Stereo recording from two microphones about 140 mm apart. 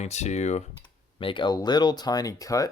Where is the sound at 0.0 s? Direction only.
55° left (ahead or behind).